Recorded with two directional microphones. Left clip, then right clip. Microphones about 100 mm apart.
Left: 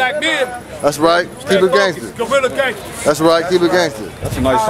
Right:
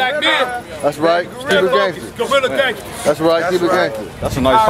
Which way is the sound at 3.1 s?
30° left (ahead or behind).